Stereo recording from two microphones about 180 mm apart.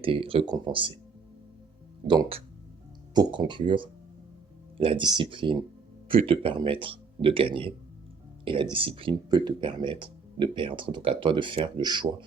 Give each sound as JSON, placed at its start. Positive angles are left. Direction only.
{"t": 0.0, "sound": "speech", "side_deg": -30}
{"t": 2.0, "sound": "speech", "side_deg": -25}